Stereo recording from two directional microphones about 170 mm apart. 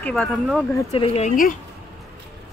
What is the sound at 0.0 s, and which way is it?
Speech, 5° left (ahead or behind).